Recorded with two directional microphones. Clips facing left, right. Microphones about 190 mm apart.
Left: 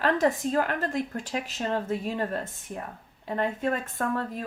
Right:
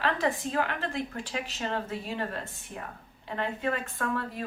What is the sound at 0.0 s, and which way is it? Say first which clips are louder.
Speech: left 5 dB; 45° left (ahead or behind).